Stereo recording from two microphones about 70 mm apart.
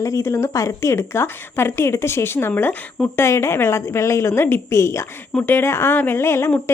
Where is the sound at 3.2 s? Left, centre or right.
Left.